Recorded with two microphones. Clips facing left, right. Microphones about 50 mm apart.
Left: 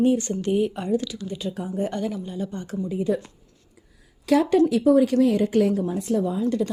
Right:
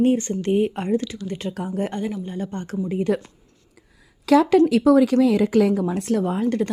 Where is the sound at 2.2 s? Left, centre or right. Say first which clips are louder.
Right 2 dB; right.